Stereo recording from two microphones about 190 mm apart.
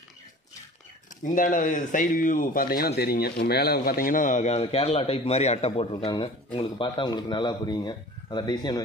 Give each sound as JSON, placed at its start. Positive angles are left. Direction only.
{"t": 1.2, "sound": "a man's voice", "side_deg": 45}